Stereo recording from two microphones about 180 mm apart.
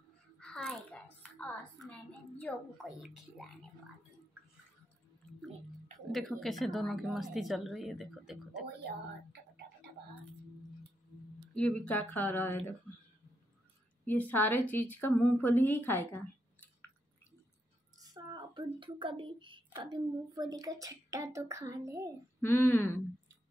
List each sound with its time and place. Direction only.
0.4 s babbling: 5° left (ahead or behind)
1.2 s a sound: 5° left (ahead or behind)
3.0 s speech: centre (ahead or behind)
6.1 s speech: centre (ahead or behind)
11.5 s speech: 5° left (ahead or behind)
14.0 s a woman's voice: 10° left (ahead or behind)
17.9 s speech: 20° right (ahead or behind)
22.4 s speech: 10° left (ahead or behind)